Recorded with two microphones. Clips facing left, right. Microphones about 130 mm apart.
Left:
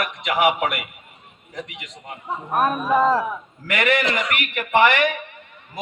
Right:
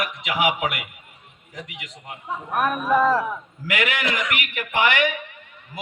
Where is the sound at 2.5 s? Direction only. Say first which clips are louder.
Left 2 dB; 30° left (ahead or behind).